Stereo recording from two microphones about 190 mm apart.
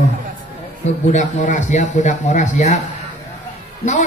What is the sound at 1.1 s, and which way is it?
Speech, 40° left (ahead or behind).